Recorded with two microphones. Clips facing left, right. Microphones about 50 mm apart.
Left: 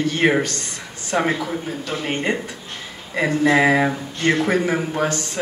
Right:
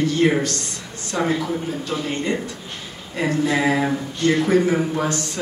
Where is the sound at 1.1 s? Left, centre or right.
Left.